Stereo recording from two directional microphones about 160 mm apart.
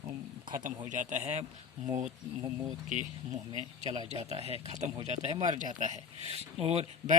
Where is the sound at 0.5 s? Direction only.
55° right (ahead or behind).